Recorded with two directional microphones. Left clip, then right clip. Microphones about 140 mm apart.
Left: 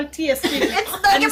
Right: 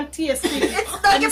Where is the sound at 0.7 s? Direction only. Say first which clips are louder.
Even; 10° left (ahead or behind).